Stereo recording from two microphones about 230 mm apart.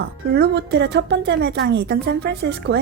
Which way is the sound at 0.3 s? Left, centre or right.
Right.